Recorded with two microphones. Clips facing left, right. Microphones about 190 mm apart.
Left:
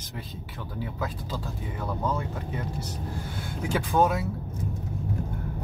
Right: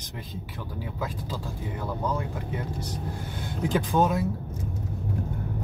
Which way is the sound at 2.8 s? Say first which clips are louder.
Right 1 dB; 15° right (ahead or behind).